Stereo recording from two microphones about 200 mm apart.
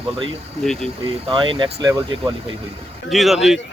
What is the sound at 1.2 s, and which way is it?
Speech, 25° right (ahead or behind).